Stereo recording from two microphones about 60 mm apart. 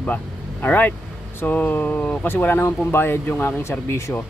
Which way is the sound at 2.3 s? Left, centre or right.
Left.